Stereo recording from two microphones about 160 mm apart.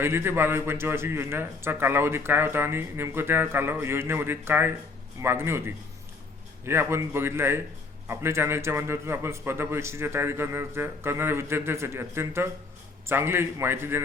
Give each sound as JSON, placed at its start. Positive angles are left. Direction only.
{"t": 0.0, "sound": "a man's voice", "side_deg": -15}